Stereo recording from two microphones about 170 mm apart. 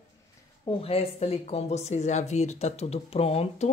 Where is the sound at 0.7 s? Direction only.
35° left (ahead or behind).